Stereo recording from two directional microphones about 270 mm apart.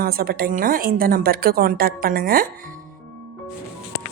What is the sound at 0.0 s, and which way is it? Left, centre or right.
A woman's voice, right.